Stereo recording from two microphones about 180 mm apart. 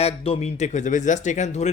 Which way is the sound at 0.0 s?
35° left (ahead or behind).